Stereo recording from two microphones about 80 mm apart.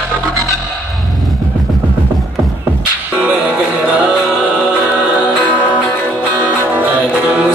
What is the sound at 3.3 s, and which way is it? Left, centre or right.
Music, centre.